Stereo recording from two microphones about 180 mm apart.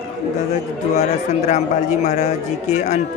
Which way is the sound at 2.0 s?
40° left (ahead or behind).